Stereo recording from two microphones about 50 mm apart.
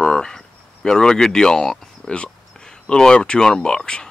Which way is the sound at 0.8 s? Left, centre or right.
Centre.